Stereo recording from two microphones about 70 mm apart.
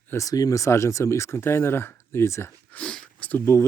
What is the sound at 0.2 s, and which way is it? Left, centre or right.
Speech, left.